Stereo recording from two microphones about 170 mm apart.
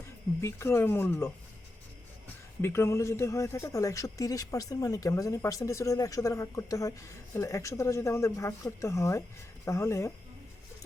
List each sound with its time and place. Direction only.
0.4 s speech: 15° left (ahead or behind)
2.6 s speech: 15° left (ahead or behind)